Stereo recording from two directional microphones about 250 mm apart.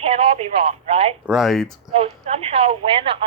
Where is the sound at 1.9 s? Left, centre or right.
Right.